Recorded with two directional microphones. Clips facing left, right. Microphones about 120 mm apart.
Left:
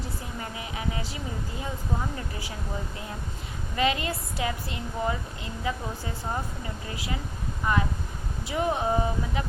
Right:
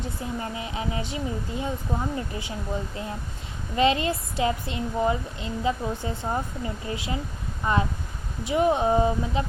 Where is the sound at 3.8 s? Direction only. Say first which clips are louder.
Right 5 dB; 25° right (ahead or behind).